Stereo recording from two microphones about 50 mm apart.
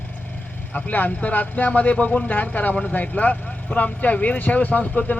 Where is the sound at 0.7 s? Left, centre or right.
Left.